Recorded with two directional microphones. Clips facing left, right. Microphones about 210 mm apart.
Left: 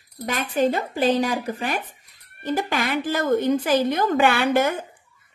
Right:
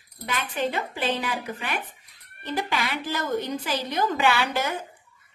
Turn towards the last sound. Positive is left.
turn(degrees=55)  # may be behind; listen again after turning